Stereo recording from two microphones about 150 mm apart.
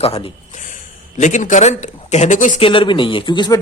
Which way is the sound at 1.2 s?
55° left (ahead or behind).